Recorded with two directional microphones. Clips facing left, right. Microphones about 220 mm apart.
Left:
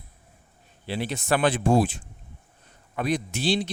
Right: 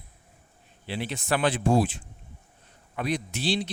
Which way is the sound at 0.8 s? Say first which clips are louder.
Left 3 dB; 40° left (ahead or behind).